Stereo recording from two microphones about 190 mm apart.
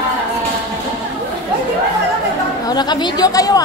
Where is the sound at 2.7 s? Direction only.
20° left (ahead or behind).